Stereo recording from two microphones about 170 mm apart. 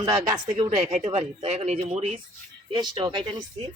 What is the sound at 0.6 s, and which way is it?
Speech, 40° right (ahead or behind).